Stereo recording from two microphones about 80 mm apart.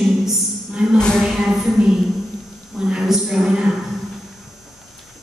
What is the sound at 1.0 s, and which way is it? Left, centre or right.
Speech, centre.